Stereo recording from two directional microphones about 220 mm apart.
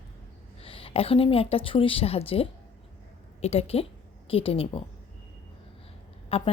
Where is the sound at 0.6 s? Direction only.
25° left (ahead or behind).